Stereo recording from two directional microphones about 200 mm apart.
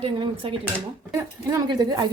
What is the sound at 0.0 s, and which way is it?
Speech, 25° right (ahead or behind).